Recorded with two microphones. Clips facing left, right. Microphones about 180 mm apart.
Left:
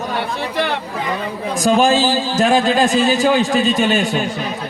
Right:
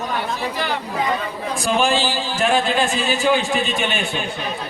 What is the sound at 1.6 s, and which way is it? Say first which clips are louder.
A man's voice: left 6 dB; 40° left (ahead or behind).